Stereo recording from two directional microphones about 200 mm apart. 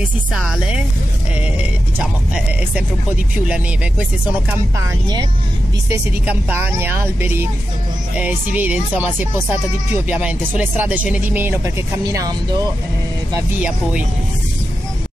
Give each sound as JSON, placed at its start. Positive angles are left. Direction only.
{"t": 0.3, "sound": "speech", "side_deg": -5}
{"t": 2.0, "sound": "speech", "side_deg": -5}
{"t": 4.7, "sound": "speech", "side_deg": -20}
{"t": 5.9, "sound": "speech", "side_deg": -10}
{"t": 10.0, "sound": "speech", "side_deg": -5}
{"t": 13.6, "sound": "speech", "side_deg": -5}